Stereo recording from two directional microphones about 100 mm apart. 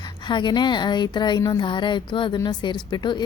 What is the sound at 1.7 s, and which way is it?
A woman's voice, 50° left (ahead or behind).